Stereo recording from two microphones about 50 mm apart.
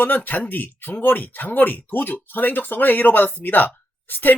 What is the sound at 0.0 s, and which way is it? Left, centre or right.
Speech, left.